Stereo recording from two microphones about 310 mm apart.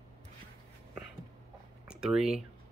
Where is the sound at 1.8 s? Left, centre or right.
Centre.